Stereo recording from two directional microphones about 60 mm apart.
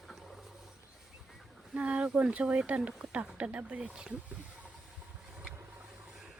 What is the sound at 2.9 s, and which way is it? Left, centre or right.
Speech, centre.